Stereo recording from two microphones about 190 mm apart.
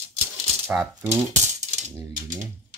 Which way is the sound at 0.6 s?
15° right (ahead or behind).